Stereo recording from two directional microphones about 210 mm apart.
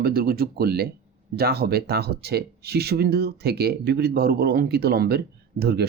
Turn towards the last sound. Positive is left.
turn(degrees=-50)  # may be behind; listen again after turning